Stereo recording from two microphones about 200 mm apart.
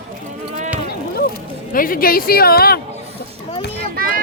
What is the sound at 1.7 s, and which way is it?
Speech, 45° left (ahead or behind).